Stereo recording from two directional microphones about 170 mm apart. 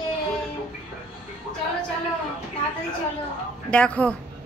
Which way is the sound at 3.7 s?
5° left (ahead or behind).